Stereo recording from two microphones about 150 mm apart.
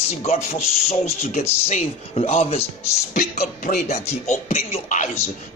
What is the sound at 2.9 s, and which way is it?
Speech, 55° left (ahead or behind).